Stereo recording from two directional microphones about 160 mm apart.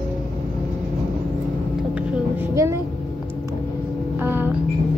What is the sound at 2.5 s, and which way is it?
Speech, 20° right (ahead or behind).